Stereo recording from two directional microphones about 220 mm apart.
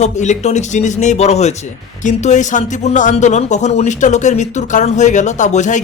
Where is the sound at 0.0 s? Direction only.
30° left (ahead or behind).